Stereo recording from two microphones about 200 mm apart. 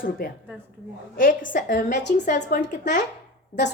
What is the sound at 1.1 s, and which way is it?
A woman's voice, 45° left (ahead or behind).